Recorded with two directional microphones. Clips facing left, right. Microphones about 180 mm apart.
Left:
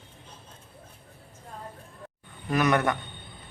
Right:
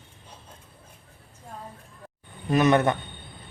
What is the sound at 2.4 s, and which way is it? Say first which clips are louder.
Speech: right 4 dB; 25° right (ahead or behind).